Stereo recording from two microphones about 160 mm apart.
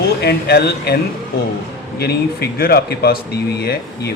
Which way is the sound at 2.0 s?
85° left.